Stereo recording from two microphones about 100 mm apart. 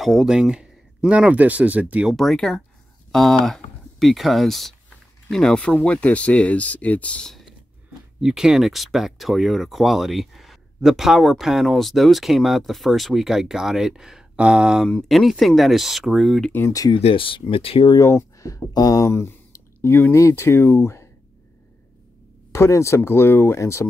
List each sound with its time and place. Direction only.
0.0 s speech: centre (ahead or behind)
2.1 s speech: 5° left (ahead or behind)
16.5 s speech: 30° left (ahead or behind)
16.9 s speech: 60° left (ahead or behind)
17.8 s speech: 30° left (ahead or behind)
22.5 s speech: 30° left (ahead or behind)